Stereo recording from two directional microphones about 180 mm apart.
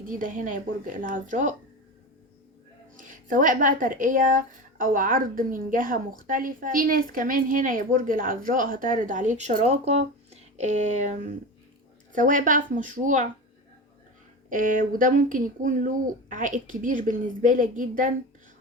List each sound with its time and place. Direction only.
0.0 s speech: 50° right (ahead or behind)
2.9 s speech: 45° right (ahead or behind)
14.5 s speech: 50° right (ahead or behind)